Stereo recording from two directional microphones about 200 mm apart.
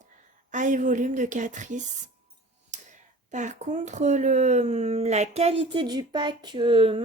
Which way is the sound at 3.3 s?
35° right (ahead or behind).